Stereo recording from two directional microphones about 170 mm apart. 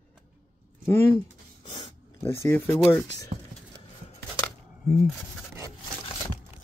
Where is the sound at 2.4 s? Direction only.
15° left (ahead or behind).